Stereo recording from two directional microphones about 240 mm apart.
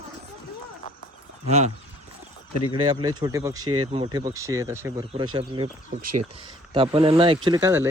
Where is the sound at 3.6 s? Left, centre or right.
Right.